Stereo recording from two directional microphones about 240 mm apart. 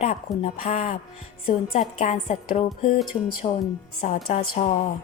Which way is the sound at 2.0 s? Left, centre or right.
Left.